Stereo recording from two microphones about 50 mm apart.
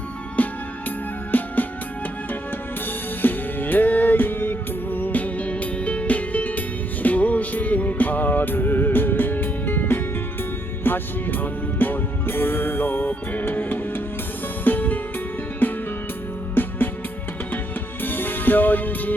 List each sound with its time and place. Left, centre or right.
0.4 s music: left
3.2 s music: left
18.0 s music: left